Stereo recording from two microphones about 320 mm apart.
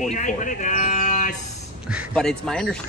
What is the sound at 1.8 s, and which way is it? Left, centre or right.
Speech, centre.